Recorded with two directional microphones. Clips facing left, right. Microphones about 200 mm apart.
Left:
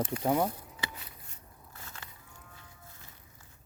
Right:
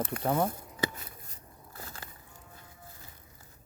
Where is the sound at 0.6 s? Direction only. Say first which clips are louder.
Right 8 dB; 45° right (ahead or behind).